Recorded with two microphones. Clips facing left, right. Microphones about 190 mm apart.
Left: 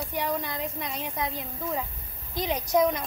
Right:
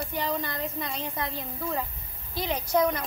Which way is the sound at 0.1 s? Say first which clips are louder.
Left 2 dB; 15° left (ahead or behind).